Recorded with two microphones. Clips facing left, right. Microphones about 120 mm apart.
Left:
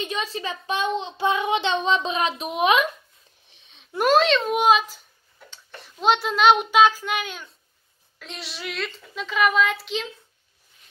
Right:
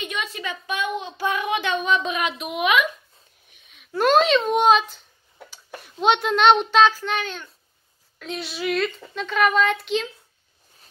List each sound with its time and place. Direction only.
0.0 s a child's voice: 35° left (ahead or behind)
3.4 s a sound: 30° left (ahead or behind)
4.0 s a child's voice: centre (ahead or behind)
5.5 s child singing: 5° right (ahead or behind)
8.2 s a child's voice: centre (ahead or behind)